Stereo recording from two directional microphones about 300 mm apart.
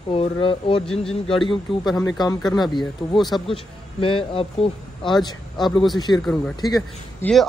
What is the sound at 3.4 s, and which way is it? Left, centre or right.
Speech, centre.